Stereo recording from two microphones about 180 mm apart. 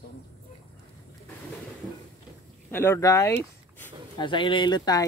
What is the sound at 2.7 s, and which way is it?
Speech, 15° left (ahead or behind).